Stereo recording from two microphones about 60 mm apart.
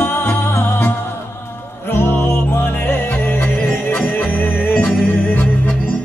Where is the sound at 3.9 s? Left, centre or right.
Left.